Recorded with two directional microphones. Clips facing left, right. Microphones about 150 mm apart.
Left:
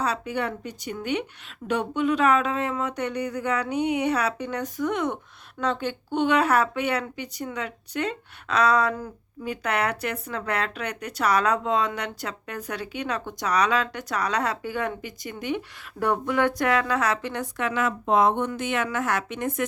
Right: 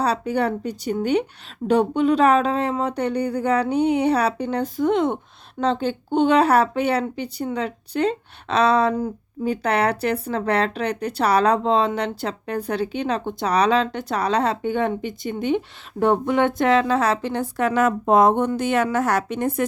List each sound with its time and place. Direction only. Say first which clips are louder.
0.0 s speech: right 6 dB; 35° right (ahead or behind)